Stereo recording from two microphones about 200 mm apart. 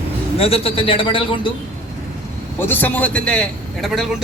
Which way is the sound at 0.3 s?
30° left (ahead or behind).